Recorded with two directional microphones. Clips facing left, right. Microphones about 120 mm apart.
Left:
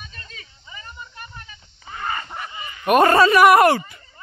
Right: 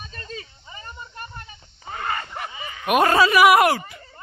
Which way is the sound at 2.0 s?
55° right (ahead or behind).